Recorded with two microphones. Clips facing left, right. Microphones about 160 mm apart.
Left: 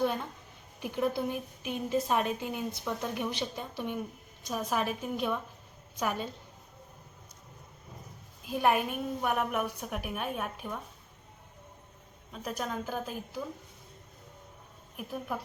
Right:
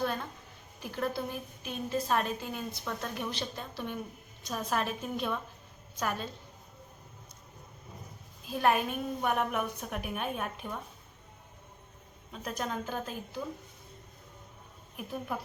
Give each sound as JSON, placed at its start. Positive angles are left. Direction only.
{"t": 0.0, "sound": "a sound", "side_deg": 15}
{"t": 0.8, "sound": "a woman's voice", "side_deg": 15}
{"t": 8.4, "sound": "a woman's voice", "side_deg": 10}
{"t": 12.3, "sound": "a woman's voice", "side_deg": 5}
{"t": 14.9, "sound": "a woman's voice", "side_deg": 0}